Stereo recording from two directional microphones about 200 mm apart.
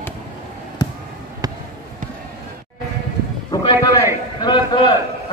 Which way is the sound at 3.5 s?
20° left (ahead or behind).